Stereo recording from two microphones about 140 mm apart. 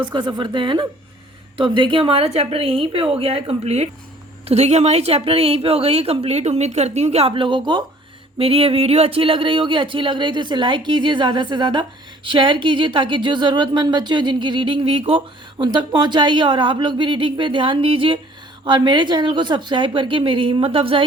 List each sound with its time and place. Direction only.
0.0 s a woman's voice: 30° right (ahead or behind)
8.4 s speech: 45° right (ahead or behind)